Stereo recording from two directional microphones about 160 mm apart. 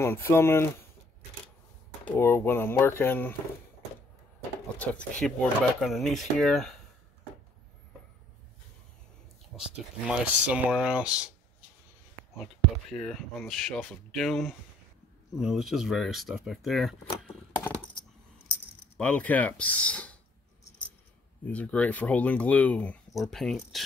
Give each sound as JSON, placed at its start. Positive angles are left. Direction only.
{"t": 0.0, "sound": "speech", "side_deg": 15}
{"t": 2.0, "sound": "speech", "side_deg": 15}
{"t": 4.7, "sound": "speech", "side_deg": 10}
{"t": 9.5, "sound": "speech", "side_deg": 0}
{"t": 12.9, "sound": "speech", "side_deg": 0}
{"t": 18.9, "sound": "speech", "side_deg": 10}
{"t": 21.5, "sound": "speech", "side_deg": 10}